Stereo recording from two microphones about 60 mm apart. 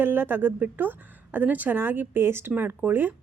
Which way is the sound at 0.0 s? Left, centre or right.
Right.